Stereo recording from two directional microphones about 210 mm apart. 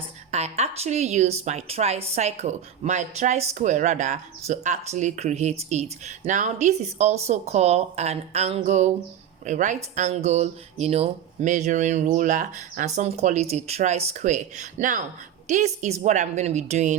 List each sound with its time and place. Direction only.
0.3 s speech: 30° right (ahead or behind)